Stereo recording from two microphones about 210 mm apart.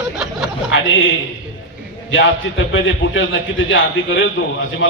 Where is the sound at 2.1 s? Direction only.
65° left (ahead or behind).